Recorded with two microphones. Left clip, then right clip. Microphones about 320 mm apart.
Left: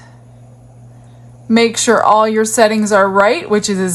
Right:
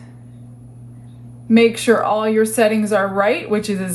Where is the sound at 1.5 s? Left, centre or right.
Left.